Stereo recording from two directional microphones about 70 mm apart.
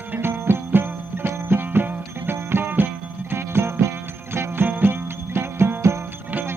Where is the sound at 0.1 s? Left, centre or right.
Right.